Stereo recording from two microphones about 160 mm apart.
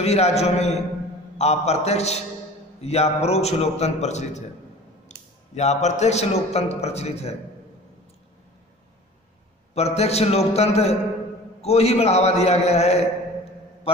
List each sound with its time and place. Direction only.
0.0 s a man's voice: 40° left (ahead or behind)
9.8 s a man's voice: 40° left (ahead or behind)